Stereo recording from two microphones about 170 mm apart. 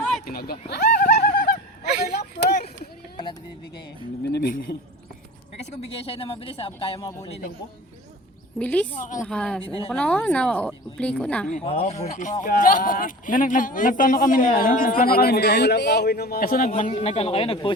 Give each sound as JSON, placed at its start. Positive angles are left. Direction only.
{"t": 0.3, "sound": "a sound", "side_deg": 60}
{"t": 4.2, "sound": "speech", "side_deg": 75}
{"t": 5.7, "sound": "speech", "side_deg": 35}
{"t": 8.5, "sound": "speech", "side_deg": 5}
{"t": 8.9, "sound": "speech", "side_deg": 50}
{"t": 9.2, "sound": "speech", "side_deg": 5}
{"t": 9.6, "sound": "speech", "side_deg": 30}
{"t": 9.9, "sound": "speech", "side_deg": 10}
{"t": 11.5, "sound": "speech", "side_deg": 35}
{"t": 12.0, "sound": "speech", "side_deg": 50}